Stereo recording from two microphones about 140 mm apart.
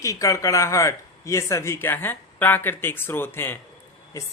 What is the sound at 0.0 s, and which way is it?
Speech, 25° left (ahead or behind).